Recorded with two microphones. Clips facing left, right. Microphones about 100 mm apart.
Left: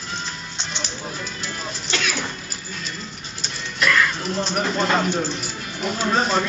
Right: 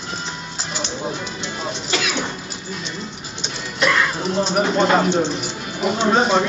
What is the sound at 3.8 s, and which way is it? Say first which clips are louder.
Music: right 1 dB; 25° right (ahead or behind).